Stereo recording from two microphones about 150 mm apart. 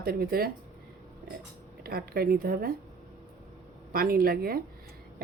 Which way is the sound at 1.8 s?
90° right.